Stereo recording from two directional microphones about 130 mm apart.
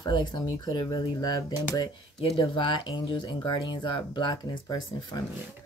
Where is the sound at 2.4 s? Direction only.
40° left (ahead or behind).